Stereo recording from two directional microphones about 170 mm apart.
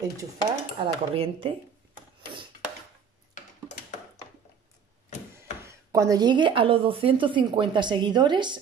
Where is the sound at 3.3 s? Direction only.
45° left (ahead or behind).